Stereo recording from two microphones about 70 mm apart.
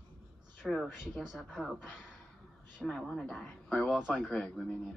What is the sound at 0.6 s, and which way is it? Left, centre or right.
A woman's voice, centre.